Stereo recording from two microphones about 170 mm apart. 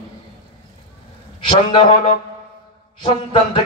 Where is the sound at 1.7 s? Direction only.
35° left (ahead or behind).